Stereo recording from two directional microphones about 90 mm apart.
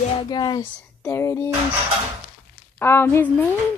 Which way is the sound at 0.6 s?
30° left (ahead or behind).